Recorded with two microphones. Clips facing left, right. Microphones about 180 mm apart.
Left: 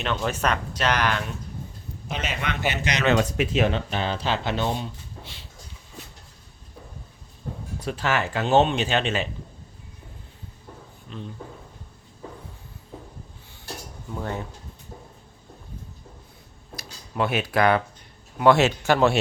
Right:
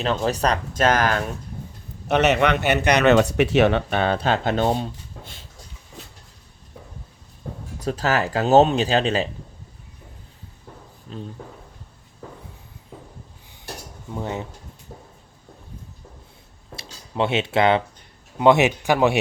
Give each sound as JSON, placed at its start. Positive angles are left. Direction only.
{"t": 0.0, "sound": "speech", "side_deg": -35}
{"t": 2.0, "sound": "speech", "side_deg": -70}
{"t": 7.8, "sound": "speech", "side_deg": -40}
{"t": 11.1, "sound": "speech", "side_deg": -35}
{"t": 14.2, "sound": "speech", "side_deg": -20}
{"t": 16.7, "sound": "speech", "side_deg": -25}